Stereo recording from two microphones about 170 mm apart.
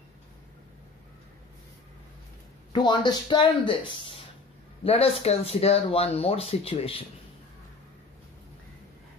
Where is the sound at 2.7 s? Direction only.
25° left (ahead or behind).